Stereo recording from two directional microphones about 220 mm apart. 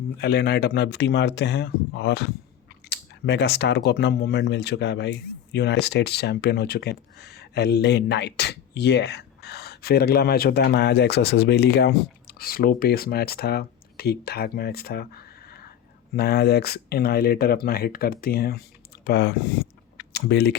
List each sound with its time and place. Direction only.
0.2 s speech: 45° left (ahead or behind)